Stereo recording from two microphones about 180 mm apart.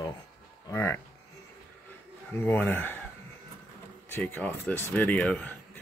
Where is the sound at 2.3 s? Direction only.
10° left (ahead or behind).